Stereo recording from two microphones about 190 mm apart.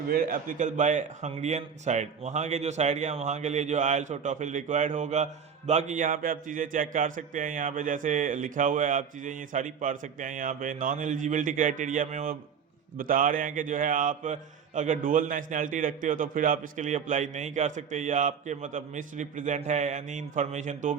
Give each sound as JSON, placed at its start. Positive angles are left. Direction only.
{"t": 0.1, "sound": "a man's voice", "side_deg": -50}